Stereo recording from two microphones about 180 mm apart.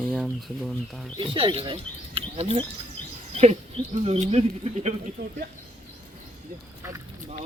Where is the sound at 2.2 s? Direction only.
35° right (ahead or behind).